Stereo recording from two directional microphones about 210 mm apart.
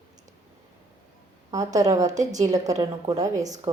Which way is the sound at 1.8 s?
15° right (ahead or behind).